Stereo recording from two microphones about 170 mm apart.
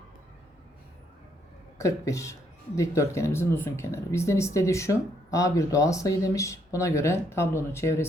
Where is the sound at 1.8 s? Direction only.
20° left (ahead or behind).